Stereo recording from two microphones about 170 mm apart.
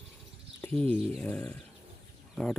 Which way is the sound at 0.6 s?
10° left (ahead or behind).